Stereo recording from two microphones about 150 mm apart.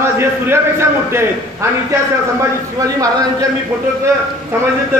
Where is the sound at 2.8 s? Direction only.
25° right (ahead or behind).